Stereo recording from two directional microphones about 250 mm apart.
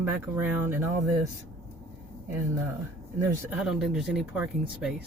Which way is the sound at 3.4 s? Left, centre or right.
Centre.